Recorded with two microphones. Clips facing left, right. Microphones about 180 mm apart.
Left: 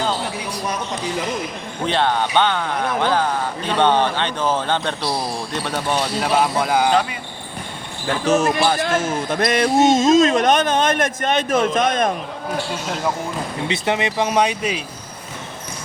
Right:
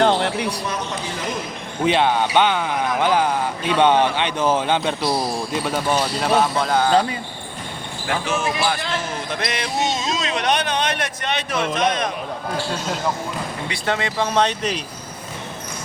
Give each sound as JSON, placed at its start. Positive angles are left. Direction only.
{"t": 0.0, "sound": "a sound", "side_deg": -70}
{"t": 1.9, "sound": "speech", "side_deg": -10}
{"t": 8.0, "sound": "speech", "side_deg": 40}
{"t": 13.7, "sound": "speech", "side_deg": 20}